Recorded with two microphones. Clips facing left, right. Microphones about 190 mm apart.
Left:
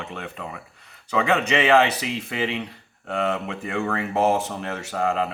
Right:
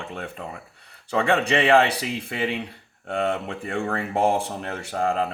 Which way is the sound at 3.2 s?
35° right (ahead or behind).